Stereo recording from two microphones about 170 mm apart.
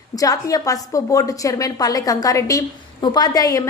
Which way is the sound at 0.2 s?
20° left (ahead or behind).